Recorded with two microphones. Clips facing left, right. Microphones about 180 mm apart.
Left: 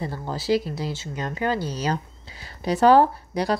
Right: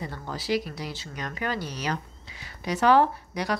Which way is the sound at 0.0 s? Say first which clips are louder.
Left 5 dB; 30° left (ahead or behind).